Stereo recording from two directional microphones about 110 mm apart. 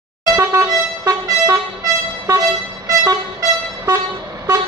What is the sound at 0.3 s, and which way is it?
Vehicle horn, 30° right (ahead or behind).